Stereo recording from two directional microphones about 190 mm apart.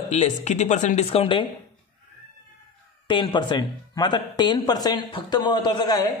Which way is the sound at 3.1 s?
25° left (ahead or behind).